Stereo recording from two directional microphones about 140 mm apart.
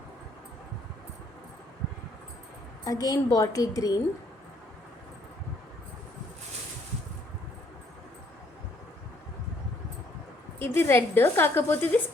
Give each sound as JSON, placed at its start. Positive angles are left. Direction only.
{"t": 2.8, "sound": "a woman's voice", "side_deg": 25}
{"t": 10.6, "sound": "a woman's voice", "side_deg": 15}